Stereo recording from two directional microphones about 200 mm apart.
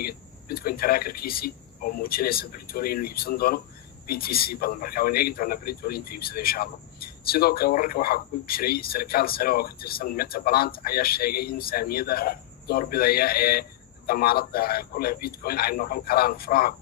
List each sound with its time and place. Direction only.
0.0 s a man's voice: 50° left (ahead or behind)